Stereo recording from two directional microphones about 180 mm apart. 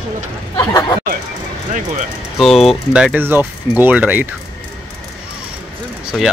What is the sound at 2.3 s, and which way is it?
Speech, centre (ahead or behind).